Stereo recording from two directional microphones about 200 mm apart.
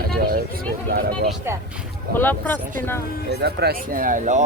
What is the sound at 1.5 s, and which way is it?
Speech, 10° right (ahead or behind).